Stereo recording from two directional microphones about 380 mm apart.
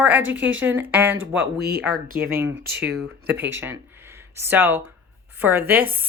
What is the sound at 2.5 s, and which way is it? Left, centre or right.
Speech, right.